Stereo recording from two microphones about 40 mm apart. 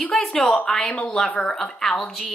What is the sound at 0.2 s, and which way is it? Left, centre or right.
A woman's voice, centre.